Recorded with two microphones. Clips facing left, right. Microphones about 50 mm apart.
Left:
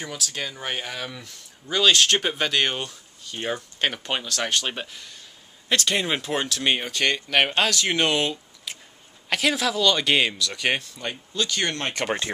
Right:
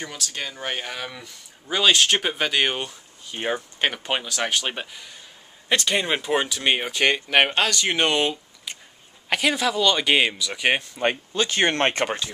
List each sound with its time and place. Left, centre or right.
0.0 s speech: centre
7.5 s speech: centre
11.0 s speech: right